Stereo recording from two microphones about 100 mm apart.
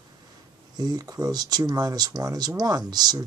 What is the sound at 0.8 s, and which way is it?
Speech, 40° right (ahead or behind).